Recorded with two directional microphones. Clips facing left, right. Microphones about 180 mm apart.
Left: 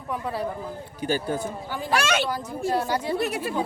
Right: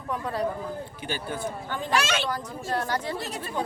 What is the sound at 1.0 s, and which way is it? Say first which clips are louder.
Speech: left 8 dB; 40° left (ahead or behind).